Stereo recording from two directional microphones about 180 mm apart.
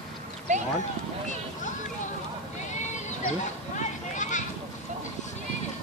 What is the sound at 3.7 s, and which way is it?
Speech, 45° left (ahead or behind).